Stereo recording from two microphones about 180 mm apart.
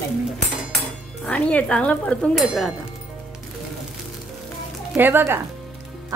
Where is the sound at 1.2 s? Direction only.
5° left (ahead or behind).